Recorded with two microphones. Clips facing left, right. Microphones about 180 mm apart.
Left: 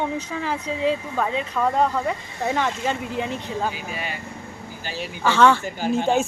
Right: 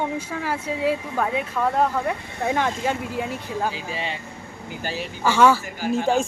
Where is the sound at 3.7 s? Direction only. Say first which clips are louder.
Right 1 dB; 30° right (ahead or behind).